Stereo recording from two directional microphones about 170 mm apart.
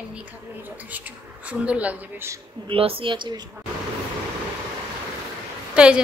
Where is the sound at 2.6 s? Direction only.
35° right (ahead or behind).